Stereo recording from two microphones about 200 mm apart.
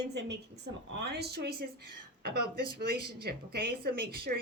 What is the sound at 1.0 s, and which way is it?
Speech, 55° right (ahead or behind).